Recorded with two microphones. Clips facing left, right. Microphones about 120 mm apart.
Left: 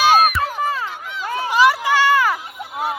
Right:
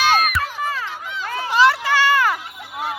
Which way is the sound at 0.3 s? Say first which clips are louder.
Left 3 dB; 30° left (ahead or behind).